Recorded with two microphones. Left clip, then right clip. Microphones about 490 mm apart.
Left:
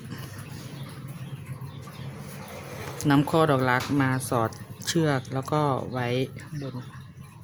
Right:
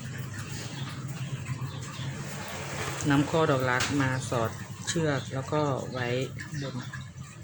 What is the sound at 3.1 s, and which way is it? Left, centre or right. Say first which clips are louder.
Speech: left 3 dB; left.